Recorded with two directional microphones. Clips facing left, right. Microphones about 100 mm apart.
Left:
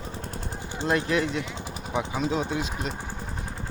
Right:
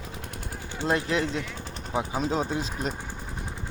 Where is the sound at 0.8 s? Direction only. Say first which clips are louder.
Left 1 dB; 25° right (ahead or behind).